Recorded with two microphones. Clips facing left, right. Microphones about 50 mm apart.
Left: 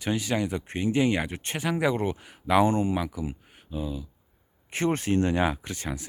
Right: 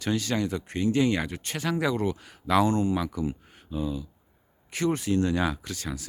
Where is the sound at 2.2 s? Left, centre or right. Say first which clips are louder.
Left 2 dB; centre.